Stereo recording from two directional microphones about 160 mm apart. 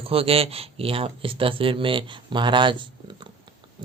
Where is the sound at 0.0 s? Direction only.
35° right (ahead or behind).